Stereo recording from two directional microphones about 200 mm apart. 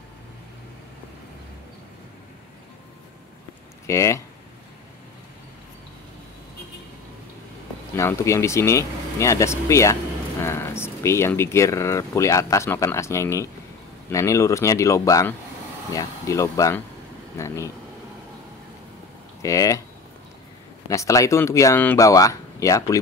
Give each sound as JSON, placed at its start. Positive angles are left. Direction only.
{"t": 3.8, "sound": "speech", "side_deg": 15}
{"t": 7.9, "sound": "speech", "side_deg": 15}
{"t": 19.4, "sound": "speech", "side_deg": 15}
{"t": 20.9, "sound": "speech", "side_deg": 15}